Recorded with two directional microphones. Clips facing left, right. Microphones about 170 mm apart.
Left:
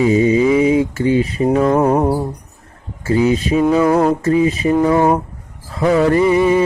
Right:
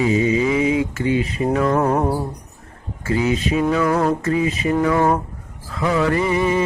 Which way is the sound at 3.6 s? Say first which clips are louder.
Left 6 dB; 20° left (ahead or behind).